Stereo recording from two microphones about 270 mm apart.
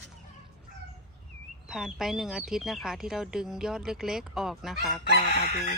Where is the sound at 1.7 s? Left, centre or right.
Centre.